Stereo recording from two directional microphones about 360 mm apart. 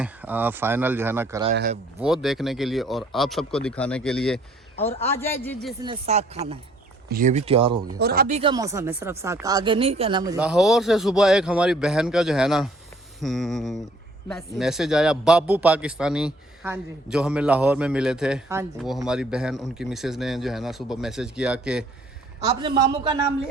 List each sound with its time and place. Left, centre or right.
0.0 s a man's voice: centre
1.5 s speech: right
2.0 s a man's voice: centre
5.8 s speech: centre
7.9 s a man's voice: right; by 21.8 s centre
22.4 s speech: centre